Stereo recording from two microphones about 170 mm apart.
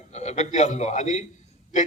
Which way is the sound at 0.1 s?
40° left (ahead or behind).